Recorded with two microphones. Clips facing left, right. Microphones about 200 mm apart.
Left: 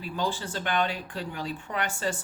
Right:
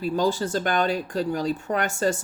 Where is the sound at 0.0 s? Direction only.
40° right (ahead or behind).